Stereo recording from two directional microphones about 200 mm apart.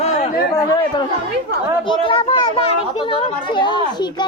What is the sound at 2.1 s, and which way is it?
A child's voice, 25° left (ahead or behind).